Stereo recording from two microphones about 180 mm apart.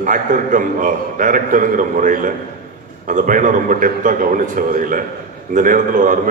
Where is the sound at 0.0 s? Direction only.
45° right (ahead or behind).